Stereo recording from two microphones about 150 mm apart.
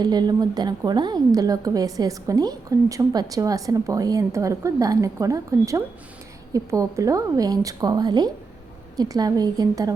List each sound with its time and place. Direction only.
0.0 s a woman's voice: 25° right (ahead or behind)